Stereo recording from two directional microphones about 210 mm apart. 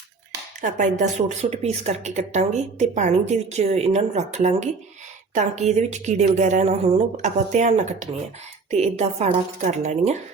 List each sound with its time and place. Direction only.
0.6 s a woman's voice: 35° right (ahead or behind)
8.7 s a woman's voice: 30° right (ahead or behind)